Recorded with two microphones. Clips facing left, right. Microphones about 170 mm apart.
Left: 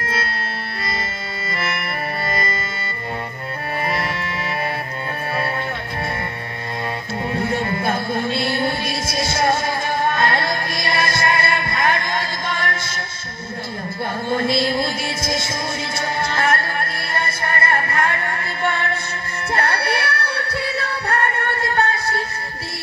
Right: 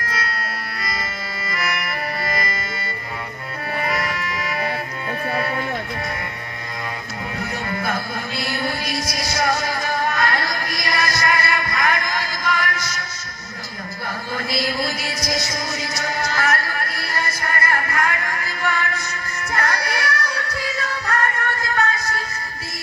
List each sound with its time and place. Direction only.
1.5 s music: 30° left (ahead or behind)
3.8 s music: 30° left (ahead or behind)
7.3 s music: 30° left (ahead or behind)
14.3 s music: 25° left (ahead or behind)